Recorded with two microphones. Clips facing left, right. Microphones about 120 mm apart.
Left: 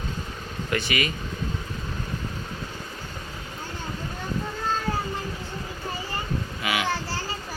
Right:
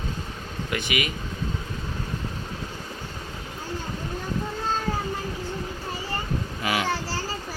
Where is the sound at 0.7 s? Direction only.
15° right (ahead or behind).